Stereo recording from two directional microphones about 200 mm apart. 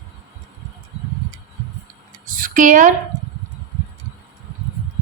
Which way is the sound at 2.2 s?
45° right (ahead or behind).